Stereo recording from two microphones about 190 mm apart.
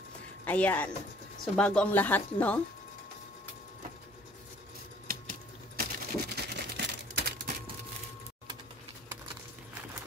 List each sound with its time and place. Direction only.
0.5 s speech: 10° left (ahead or behind)
5.8 s typewriter: 55° right (ahead or behind)